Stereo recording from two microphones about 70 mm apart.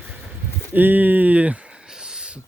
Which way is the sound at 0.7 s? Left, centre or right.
Right.